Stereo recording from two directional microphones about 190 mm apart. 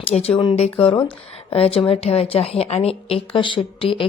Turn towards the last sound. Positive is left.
turn(degrees=30)  # may be behind; listen again after turning